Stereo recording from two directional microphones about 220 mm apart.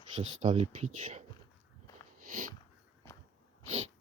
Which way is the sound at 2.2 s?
35° right (ahead or behind).